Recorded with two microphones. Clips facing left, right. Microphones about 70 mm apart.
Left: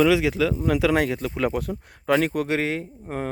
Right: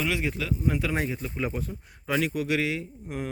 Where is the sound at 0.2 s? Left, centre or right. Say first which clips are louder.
Left 7 dB; left.